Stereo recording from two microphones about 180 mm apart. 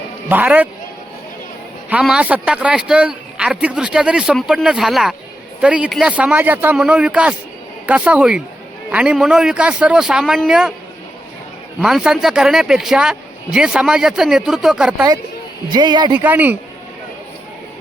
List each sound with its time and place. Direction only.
0.3 s a man's voice: 10° right (ahead or behind)
1.9 s a man's voice: 5° right (ahead or behind)
11.8 s speech: 5° right (ahead or behind)
15.7 s speech: 25° right (ahead or behind)
16.1 s a man's voice: 10° right (ahead or behind)